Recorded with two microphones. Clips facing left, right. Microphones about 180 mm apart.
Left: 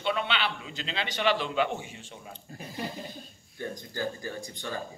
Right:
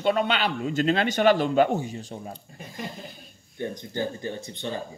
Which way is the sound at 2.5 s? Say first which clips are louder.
Left 3 dB; centre (ahead or behind).